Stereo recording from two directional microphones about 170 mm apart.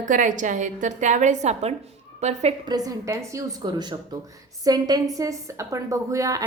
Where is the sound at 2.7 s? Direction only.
20° right (ahead or behind).